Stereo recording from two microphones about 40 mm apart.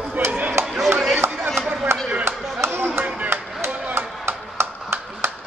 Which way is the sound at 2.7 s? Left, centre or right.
Right.